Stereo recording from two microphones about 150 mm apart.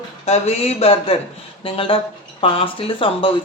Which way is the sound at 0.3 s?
45° left (ahead or behind).